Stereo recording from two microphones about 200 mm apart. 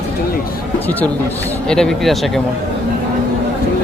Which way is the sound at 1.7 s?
5° left (ahead or behind).